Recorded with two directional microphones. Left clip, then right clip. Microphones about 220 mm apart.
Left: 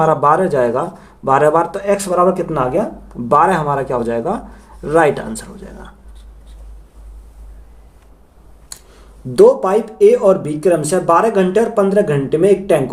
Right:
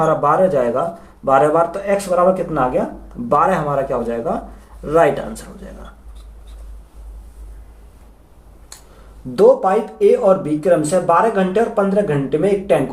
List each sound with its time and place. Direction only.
0.0 s speech: 45° left (ahead or behind)
9.3 s speech: 50° left (ahead or behind)